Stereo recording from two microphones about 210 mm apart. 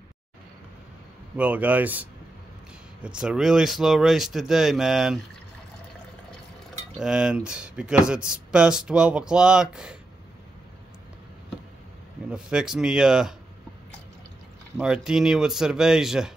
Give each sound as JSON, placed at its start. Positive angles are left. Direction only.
{"t": 1.3, "sound": "speech", "side_deg": -5}
{"t": 7.0, "sound": "speech", "side_deg": -5}
{"t": 12.3, "sound": "speech", "side_deg": -5}
{"t": 14.8, "sound": "speech", "side_deg": -5}